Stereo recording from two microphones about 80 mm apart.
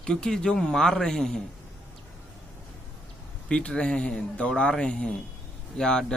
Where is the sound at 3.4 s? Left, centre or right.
Centre.